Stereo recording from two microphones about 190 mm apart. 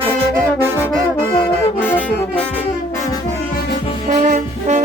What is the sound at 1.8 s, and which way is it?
Saxophone, 10° left (ahead or behind).